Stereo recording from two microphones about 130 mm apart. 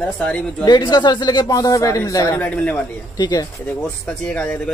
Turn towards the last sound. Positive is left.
turn(degrees=5)  # may be behind; listen again after turning